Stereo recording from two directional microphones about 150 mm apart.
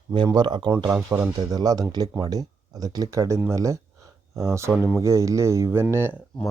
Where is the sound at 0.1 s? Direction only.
30° right (ahead or behind).